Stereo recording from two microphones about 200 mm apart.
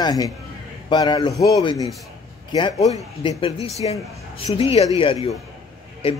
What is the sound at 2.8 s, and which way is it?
A man's voice, 30° left (ahead or behind).